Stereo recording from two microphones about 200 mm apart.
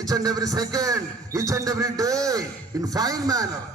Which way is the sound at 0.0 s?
20° right (ahead or behind).